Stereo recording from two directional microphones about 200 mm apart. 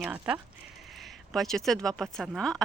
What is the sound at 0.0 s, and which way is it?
Speech, 10° right (ahead or behind).